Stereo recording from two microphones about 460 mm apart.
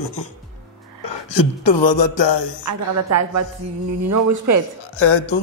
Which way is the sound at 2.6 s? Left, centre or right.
Right.